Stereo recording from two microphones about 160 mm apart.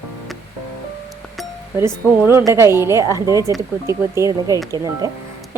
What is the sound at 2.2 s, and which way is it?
A woman's voice, 15° right (ahead or behind).